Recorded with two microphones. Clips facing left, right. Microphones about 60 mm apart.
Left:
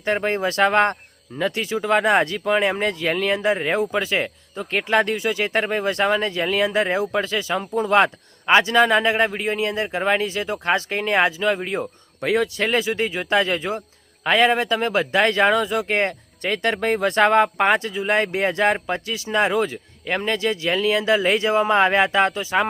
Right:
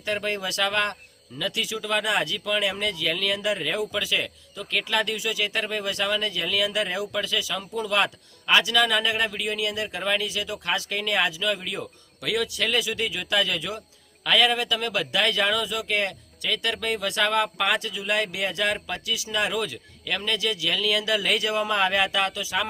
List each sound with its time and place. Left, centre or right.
0.0 s speech: left